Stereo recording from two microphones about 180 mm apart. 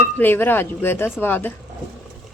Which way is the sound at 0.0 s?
10° left (ahead or behind).